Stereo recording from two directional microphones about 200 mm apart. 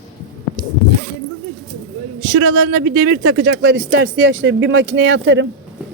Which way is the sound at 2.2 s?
75° right (ahead or behind).